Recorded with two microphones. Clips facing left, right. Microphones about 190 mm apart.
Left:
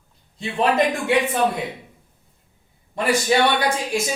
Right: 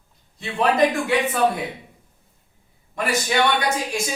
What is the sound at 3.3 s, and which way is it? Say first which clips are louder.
Speech: left 3 dB; 35° left (ahead or behind).